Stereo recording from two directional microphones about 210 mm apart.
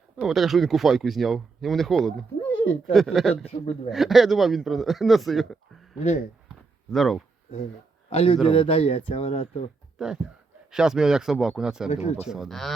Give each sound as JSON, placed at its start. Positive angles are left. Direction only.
{"t": 0.2, "sound": "speech", "side_deg": 0}
{"t": 3.4, "sound": "speech", "side_deg": 30}
{"t": 3.8, "sound": "speech", "side_deg": 0}
{"t": 6.0, "sound": "speech", "side_deg": 35}
{"t": 6.9, "sound": "speech", "side_deg": 0}
{"t": 8.1, "sound": "speech", "side_deg": 25}
{"t": 10.0, "sound": "speech", "side_deg": 0}
{"t": 11.9, "sound": "speech", "side_deg": 30}
{"t": 12.3, "sound": "speech", "side_deg": 0}